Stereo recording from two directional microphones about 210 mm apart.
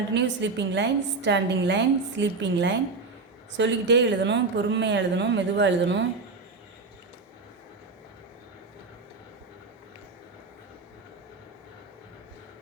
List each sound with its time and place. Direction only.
0.1 s a woman's voice: 55° right (ahead or behind)